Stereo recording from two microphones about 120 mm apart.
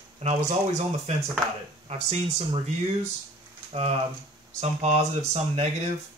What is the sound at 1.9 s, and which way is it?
Speech, 55° right (ahead or behind).